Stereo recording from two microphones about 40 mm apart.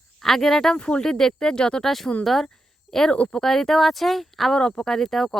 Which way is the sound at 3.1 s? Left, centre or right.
Left.